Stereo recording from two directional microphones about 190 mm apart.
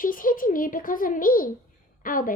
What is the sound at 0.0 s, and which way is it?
A child's voice, 45° left (ahead or behind).